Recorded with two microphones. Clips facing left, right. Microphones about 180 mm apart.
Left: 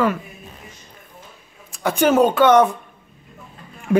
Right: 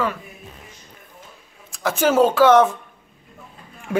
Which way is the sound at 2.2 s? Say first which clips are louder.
Right 1 dB; centre (ahead or behind).